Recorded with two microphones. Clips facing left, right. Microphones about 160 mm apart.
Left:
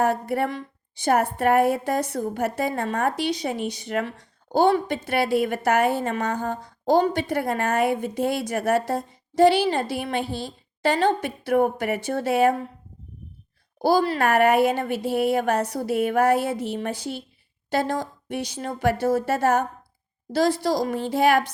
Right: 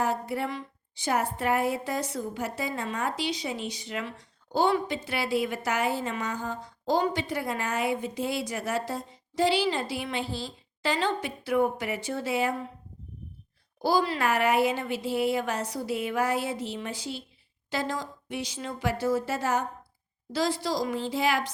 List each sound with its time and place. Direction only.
0.0 s a woman's voice: 55° left (ahead or behind)
13.8 s a woman's voice: 55° left (ahead or behind)